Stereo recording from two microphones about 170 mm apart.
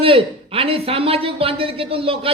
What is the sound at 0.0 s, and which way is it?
Speech, 30° right (ahead or behind).